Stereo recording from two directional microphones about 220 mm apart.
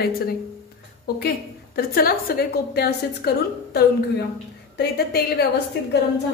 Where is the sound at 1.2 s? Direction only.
45° left (ahead or behind).